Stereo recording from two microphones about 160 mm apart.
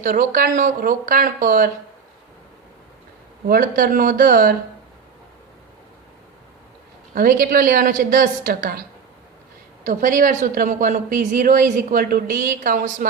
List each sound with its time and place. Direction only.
0.0 s a woman's voice: 55° right (ahead or behind)
3.4 s a woman's voice: 65° right (ahead or behind)
7.1 s a woman's voice: 60° right (ahead or behind)
9.8 s a woman's voice: 55° right (ahead or behind)